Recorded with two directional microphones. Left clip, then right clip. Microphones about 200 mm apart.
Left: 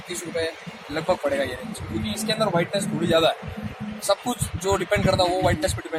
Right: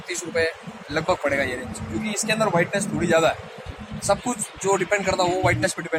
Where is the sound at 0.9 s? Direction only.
10° left (ahead or behind).